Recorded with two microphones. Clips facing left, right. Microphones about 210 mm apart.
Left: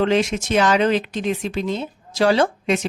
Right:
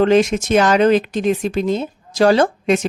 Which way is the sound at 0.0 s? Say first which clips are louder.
Right 5 dB; 45° right (ahead or behind).